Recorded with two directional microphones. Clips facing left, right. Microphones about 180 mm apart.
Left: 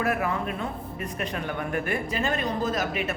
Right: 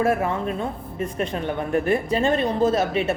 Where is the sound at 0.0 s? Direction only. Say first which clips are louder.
Right 5 dB; 30° right (ahead or behind).